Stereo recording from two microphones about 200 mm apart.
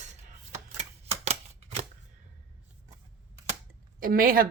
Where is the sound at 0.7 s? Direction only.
30° right (ahead or behind).